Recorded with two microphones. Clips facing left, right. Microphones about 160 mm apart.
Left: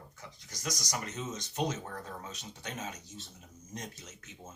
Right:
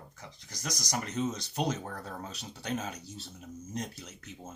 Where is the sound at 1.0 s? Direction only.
35° right (ahead or behind).